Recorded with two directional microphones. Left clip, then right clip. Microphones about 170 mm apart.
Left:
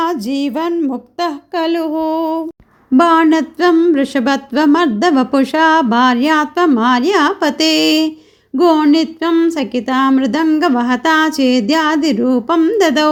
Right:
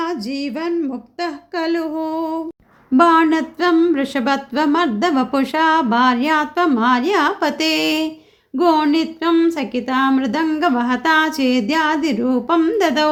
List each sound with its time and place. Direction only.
0.0 s speech: 35° left (ahead or behind)